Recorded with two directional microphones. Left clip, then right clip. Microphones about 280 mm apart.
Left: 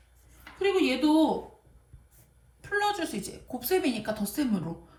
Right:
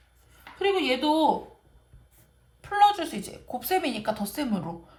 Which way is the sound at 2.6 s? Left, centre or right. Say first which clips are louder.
Right 7 dB; right.